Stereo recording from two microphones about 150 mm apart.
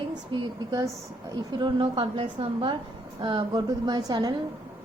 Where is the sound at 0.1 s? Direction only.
25° right (ahead or behind).